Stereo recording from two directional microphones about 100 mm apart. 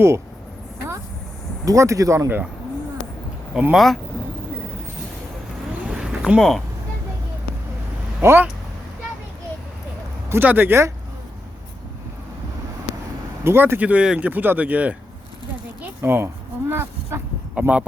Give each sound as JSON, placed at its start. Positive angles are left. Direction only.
{"t": 1.6, "sound": "speech", "side_deg": -30}
{"t": 3.5, "sound": "speech", "side_deg": -10}
{"t": 5.8, "sound": "a sound", "side_deg": -10}
{"t": 8.2, "sound": "speech", "side_deg": -25}
{"t": 10.2, "sound": "speech", "side_deg": -20}
{"t": 13.4, "sound": "speech", "side_deg": -25}
{"t": 17.5, "sound": "speech", "side_deg": -10}